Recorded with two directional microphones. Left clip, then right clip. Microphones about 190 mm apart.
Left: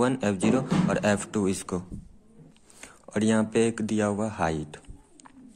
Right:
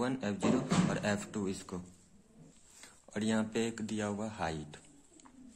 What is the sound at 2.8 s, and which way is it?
Speech, 20° left (ahead or behind).